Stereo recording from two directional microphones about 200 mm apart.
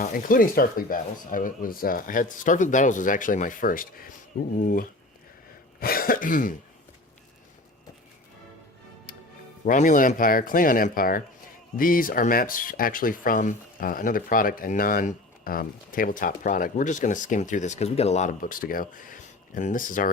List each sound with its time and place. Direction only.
0.0 s speech: 45° left (ahead or behind)
9.6 s speech: 40° left (ahead or behind)